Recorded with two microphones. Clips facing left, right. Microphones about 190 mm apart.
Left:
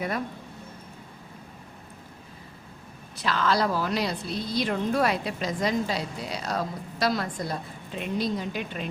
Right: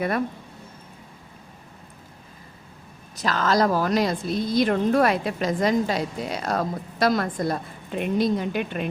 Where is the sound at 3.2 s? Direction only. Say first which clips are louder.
Right 4 dB; 45° right (ahead or behind).